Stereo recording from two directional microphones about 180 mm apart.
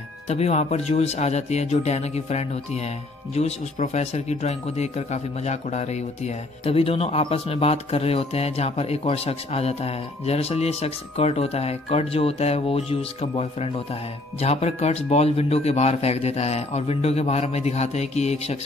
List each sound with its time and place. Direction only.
0.3 s speech: 40° left (ahead or behind)